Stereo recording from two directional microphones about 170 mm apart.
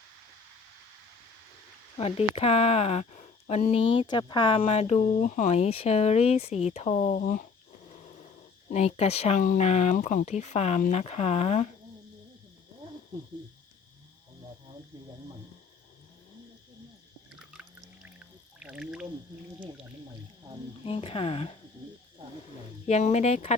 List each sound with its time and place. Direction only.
2.0 s speech: 35° left (ahead or behind)
7.2 s speech: 55° left (ahead or behind)
8.7 s speech: 40° left (ahead or behind)
17.5 s pour: 5° right (ahead or behind)
20.8 s speech: 35° left (ahead or behind)
22.9 s speech: 40° left (ahead or behind)